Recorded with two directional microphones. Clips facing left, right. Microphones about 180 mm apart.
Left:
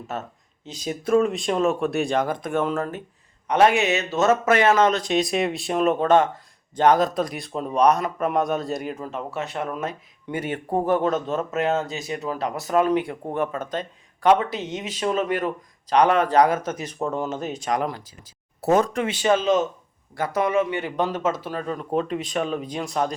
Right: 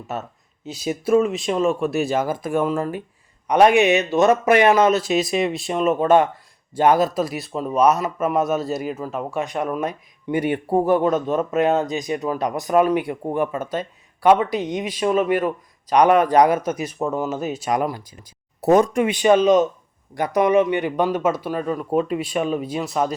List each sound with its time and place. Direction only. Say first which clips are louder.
0.6 s speech: right 4 dB; 10° right (ahead or behind)